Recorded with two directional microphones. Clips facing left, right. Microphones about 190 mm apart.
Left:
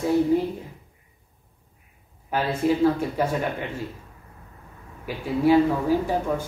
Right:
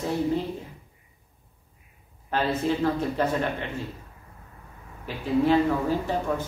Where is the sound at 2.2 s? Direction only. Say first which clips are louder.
Left 2 dB; 10° left (ahead or behind).